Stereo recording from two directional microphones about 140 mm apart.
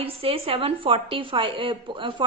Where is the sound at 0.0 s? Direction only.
40° right (ahead or behind).